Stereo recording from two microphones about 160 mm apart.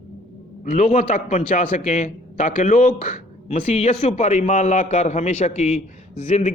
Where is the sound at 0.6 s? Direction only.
50° left (ahead or behind).